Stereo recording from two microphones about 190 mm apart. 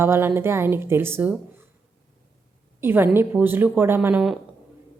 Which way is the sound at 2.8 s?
10° right (ahead or behind).